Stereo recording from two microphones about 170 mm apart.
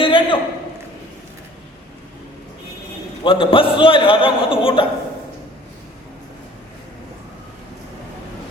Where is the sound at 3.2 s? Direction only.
30° left (ahead or behind).